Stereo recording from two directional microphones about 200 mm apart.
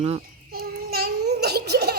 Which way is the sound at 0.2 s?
50° right (ahead or behind).